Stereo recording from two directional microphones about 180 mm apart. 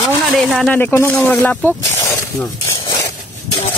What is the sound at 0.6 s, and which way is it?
Speech, 10° left (ahead or behind).